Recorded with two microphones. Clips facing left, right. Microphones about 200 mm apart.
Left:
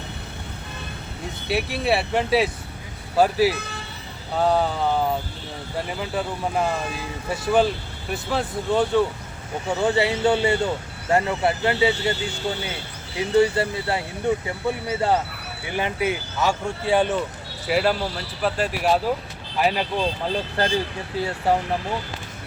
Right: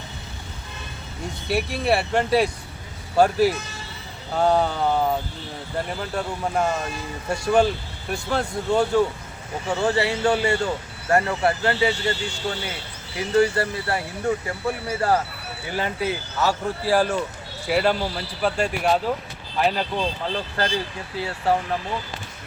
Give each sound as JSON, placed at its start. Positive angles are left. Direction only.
{"t": 1.5, "sound": "speech", "side_deg": 0}
{"t": 9.8, "sound": "speech", "side_deg": 20}
{"t": 13.1, "sound": "speech", "side_deg": 25}
{"t": 16.4, "sound": "speech", "side_deg": -5}